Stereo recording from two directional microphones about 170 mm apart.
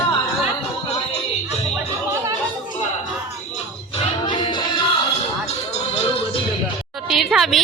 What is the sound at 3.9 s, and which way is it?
Music, 30° left (ahead or behind).